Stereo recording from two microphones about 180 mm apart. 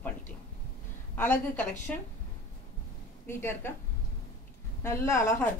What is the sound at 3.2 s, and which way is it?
Speech, 15° left (ahead or behind).